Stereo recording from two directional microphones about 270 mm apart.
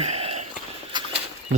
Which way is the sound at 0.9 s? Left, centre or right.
Centre.